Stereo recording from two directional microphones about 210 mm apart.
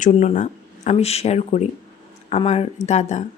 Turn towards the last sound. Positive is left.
turn(degrees=35)  # may be behind; listen again after turning